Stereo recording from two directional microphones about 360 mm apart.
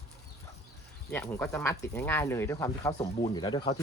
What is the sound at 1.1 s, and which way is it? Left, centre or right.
Speech, centre.